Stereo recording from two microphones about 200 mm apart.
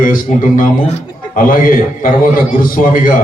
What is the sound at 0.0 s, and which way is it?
A man's voice, 45° left (ahead or behind).